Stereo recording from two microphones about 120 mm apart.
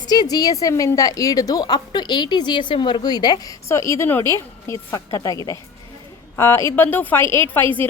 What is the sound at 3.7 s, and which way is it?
A woman's voice, 25° left (ahead or behind).